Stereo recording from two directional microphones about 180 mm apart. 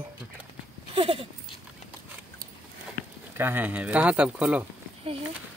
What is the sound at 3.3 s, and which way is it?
Speech, 10° right (ahead or behind).